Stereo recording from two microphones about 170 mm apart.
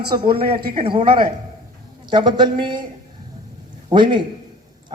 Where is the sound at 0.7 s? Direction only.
30° right (ahead or behind).